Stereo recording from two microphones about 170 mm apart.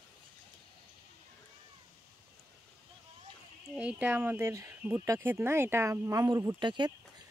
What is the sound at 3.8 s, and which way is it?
Speech, 10° right (ahead or behind).